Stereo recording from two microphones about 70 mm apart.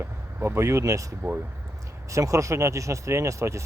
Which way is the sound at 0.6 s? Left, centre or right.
Right.